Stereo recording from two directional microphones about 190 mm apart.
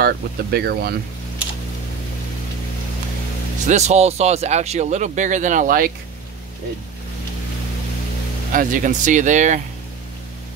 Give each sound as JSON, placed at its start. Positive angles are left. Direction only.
{"t": 0.0, "sound": "speech", "side_deg": -55}
{"t": 3.6, "sound": "speech", "side_deg": -35}
{"t": 8.5, "sound": "speech", "side_deg": -45}